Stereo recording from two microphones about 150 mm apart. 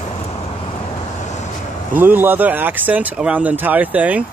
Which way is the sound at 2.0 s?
10° right (ahead or behind).